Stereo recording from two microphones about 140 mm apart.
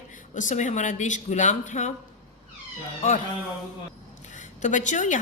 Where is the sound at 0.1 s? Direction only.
65° left (ahead or behind).